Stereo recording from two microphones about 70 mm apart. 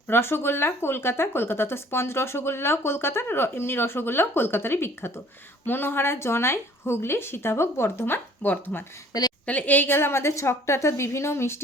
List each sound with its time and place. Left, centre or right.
0.1 s speech: left